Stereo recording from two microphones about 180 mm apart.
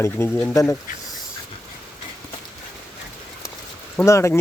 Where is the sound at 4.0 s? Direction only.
15° left (ahead or behind).